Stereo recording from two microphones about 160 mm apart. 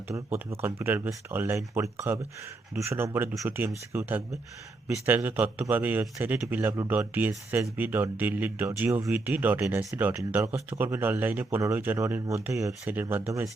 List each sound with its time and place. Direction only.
0.1 s a man's voice: 15° right (ahead or behind)